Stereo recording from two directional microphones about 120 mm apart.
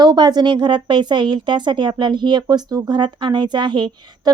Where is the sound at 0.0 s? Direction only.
35° right (ahead or behind).